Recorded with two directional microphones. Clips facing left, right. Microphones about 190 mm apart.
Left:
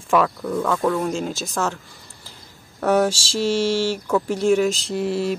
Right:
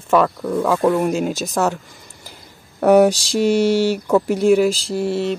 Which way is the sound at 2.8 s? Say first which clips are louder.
Right 7 dB; 15° right (ahead or behind).